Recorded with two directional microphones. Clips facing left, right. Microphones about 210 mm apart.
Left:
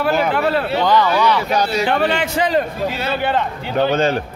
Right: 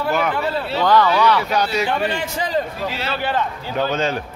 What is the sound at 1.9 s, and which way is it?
A man's voice, 70° left (ahead or behind).